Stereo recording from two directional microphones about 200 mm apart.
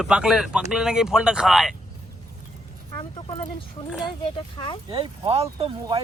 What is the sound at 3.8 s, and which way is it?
Speech, 30° left (ahead or behind).